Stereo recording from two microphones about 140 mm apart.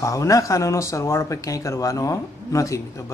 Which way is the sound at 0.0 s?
20° left (ahead or behind).